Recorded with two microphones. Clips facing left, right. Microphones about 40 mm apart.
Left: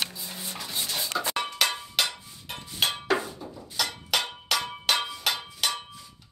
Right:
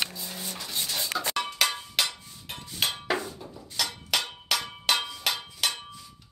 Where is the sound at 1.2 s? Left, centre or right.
Centre.